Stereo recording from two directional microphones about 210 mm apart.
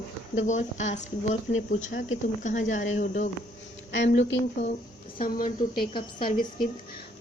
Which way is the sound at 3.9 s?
55° left (ahead or behind).